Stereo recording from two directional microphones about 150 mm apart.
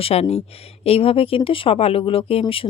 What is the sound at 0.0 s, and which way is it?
A woman's voice, 45° left (ahead or behind).